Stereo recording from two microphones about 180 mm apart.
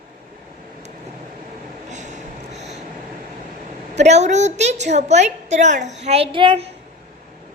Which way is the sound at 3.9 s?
40° right (ahead or behind).